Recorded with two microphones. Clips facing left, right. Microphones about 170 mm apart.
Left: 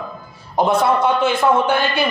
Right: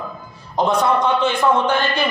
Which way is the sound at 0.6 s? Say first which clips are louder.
Left 1 dB; 10° left (ahead or behind).